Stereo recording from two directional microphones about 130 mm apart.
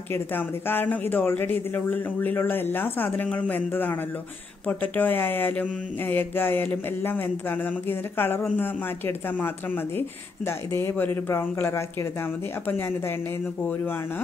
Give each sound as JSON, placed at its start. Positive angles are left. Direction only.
{"t": 0.1, "sound": "speech", "side_deg": 15}